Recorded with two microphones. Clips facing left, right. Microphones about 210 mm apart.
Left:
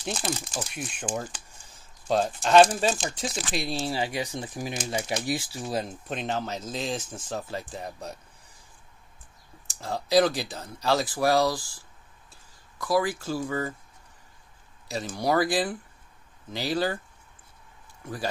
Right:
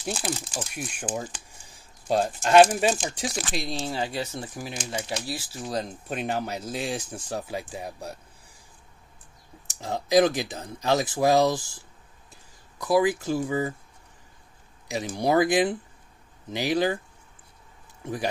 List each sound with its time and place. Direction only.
0.0 s speech: 10° right (ahead or behind)
3.6 s speech: 5° left (ahead or behind)
5.7 s speech: 5° left (ahead or behind)
6.0 s speech: 10° right (ahead or behind)
9.7 s speech: 20° right (ahead or behind)
14.9 s speech: 15° right (ahead or behind)
18.0 s speech: 20° right (ahead or behind)